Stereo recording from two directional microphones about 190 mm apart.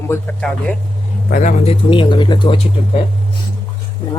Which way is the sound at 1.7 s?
25° left (ahead or behind).